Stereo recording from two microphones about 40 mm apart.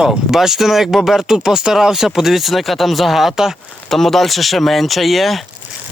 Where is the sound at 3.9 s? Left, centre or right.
Centre.